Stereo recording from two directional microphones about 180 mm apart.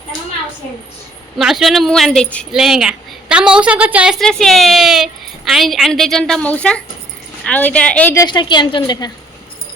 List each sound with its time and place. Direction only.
1.4 s a woman's voice: centre (ahead or behind); by 9.1 s 25° left (ahead or behind)